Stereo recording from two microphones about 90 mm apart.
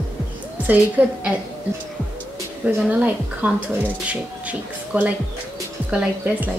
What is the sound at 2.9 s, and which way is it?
Speech, 15° right (ahead or behind).